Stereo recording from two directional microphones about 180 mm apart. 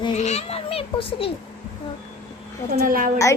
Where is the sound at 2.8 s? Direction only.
50° right (ahead or behind).